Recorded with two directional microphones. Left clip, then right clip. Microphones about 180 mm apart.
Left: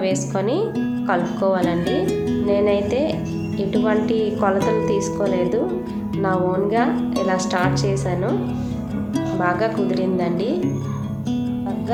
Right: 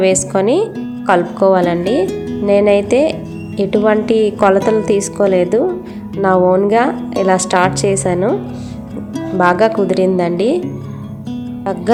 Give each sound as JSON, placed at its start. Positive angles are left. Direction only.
{"t": 0.0, "sound": "a woman's voice", "side_deg": -45}
{"t": 2.0, "sound": "music", "side_deg": 0}
{"t": 2.5, "sound": "a woman's voice", "side_deg": -45}
{"t": 6.9, "sound": "speech", "side_deg": 0}
{"t": 7.3, "sound": "a woman's voice", "side_deg": -45}
{"t": 9.4, "sound": "a woman's voice", "side_deg": -50}